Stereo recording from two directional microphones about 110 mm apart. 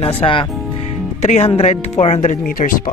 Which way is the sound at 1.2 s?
70° left (ahead or behind).